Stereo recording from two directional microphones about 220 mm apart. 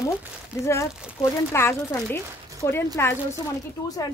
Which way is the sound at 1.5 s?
10° left (ahead or behind).